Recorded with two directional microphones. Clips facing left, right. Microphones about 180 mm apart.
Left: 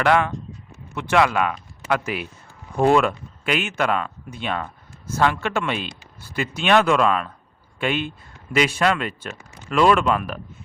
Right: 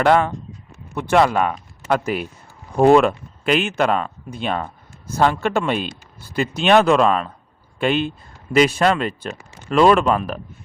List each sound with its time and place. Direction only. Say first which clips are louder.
0.0 s speech: right 3 dB; 45° right (ahead or behind)